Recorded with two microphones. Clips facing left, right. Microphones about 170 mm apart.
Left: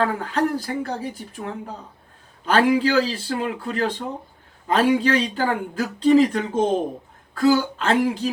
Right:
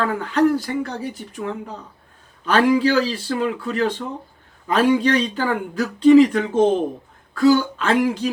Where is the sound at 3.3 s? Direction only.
45° left (ahead or behind).